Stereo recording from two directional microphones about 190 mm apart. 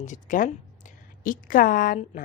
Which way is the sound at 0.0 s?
40° left (ahead or behind).